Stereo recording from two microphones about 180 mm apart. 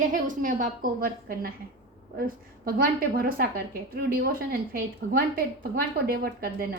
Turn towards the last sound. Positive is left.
turn(degrees=-55)  # may be behind; listen again after turning